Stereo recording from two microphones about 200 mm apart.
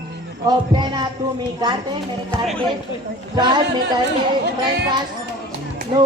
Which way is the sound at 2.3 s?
5° left (ahead or behind).